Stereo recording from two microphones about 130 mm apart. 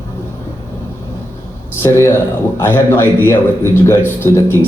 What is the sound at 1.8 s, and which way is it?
A man's voice, 20° left (ahead or behind).